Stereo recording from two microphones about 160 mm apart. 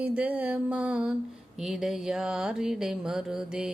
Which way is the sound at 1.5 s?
Centre (ahead or behind).